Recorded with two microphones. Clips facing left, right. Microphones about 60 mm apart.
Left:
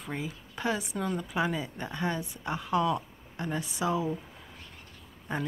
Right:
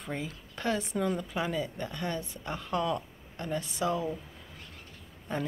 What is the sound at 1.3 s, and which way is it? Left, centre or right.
Speech, centre.